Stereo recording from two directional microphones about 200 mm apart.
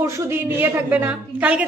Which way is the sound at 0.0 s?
15° right (ahead or behind).